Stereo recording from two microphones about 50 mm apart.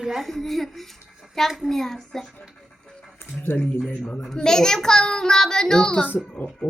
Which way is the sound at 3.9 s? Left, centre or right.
Left.